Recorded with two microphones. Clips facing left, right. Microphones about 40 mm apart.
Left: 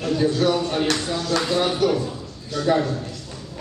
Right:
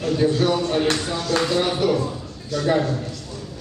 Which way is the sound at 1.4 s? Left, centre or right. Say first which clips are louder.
Even; centre.